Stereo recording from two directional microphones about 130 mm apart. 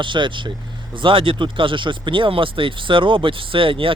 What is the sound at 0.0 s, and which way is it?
Speech, 40° right (ahead or behind).